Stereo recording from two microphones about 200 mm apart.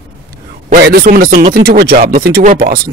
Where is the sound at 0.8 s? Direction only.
50° right (ahead or behind).